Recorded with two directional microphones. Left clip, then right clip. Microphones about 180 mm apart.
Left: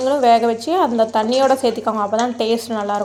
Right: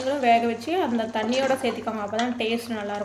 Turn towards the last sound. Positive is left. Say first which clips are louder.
# left 9 dB
turn(degrees=35)  # may be behind; listen again after turning